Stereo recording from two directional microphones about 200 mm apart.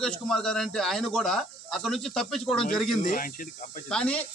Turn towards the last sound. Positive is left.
turn(degrees=5)  # may be behind; listen again after turning